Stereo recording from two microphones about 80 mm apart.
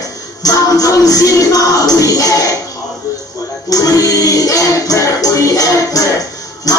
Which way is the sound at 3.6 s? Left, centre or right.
Left.